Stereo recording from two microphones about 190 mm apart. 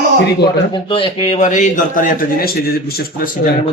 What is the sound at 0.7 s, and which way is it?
A man's voice, 30° left (ahead or behind).